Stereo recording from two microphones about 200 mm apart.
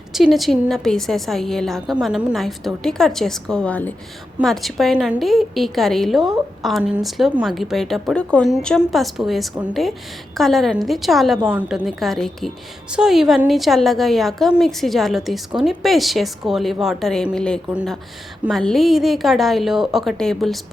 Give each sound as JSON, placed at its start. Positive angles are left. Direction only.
{"t": 0.1, "sound": "a woman's voice", "side_deg": 0}